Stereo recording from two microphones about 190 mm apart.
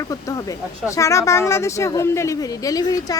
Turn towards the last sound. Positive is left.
turn(degrees=20)  # may be behind; listen again after turning